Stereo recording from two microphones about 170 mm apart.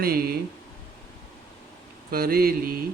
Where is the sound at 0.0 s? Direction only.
65° right (ahead or behind).